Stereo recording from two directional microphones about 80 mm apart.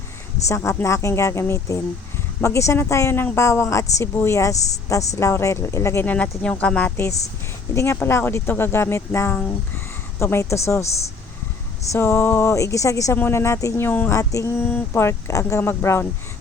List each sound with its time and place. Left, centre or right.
0.4 s speech: left
6.4 s a woman's voice: centre
7.7 s speech: left
7.9 s speech: left
10.3 s speech: left
11.9 s speech: left
13.1 s speech: left
14.1 s speech: left
14.5 s speech: left